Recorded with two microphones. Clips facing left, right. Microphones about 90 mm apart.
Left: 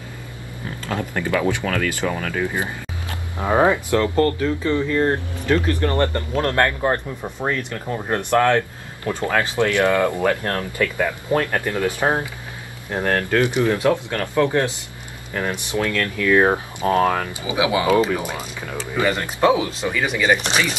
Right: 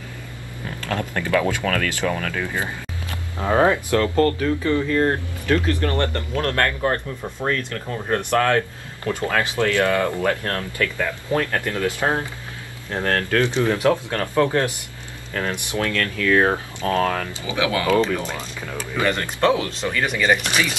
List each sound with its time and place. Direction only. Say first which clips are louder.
0.8 s speech: left 1 dB; 20° left (ahead or behind)